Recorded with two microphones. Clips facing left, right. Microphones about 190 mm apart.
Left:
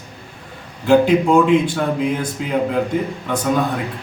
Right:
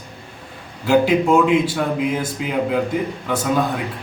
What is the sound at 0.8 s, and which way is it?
A man's voice, 5° right (ahead or behind).